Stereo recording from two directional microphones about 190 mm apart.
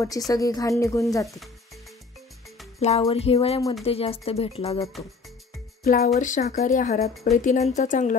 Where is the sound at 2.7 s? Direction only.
35° left (ahead or behind).